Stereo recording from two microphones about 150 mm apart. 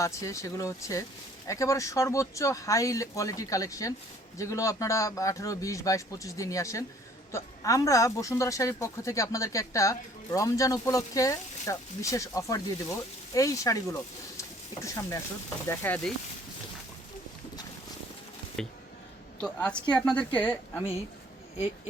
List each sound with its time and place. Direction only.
0.0 s a woman's voice: 20° left (ahead or behind)
18.6 s a woman's voice: 5° left (ahead or behind)